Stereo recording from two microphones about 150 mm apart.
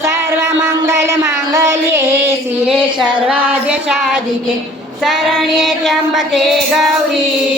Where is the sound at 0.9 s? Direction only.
20° right (ahead or behind).